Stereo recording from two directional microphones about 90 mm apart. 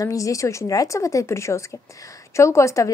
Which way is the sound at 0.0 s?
40° left (ahead or behind).